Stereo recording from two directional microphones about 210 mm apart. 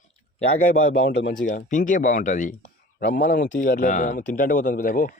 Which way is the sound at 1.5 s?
40° left (ahead or behind).